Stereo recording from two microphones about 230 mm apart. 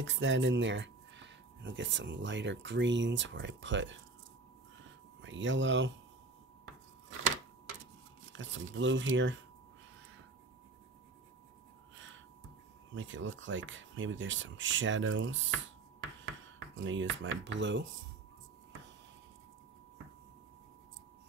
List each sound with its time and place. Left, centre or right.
0.0 s speech: right
5.2 s speech: right
8.3 s speech: right
12.9 s speech: right
16.5 s speech: right